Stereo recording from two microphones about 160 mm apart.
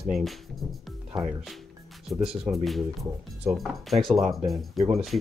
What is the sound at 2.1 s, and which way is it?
Speech, centre (ahead or behind).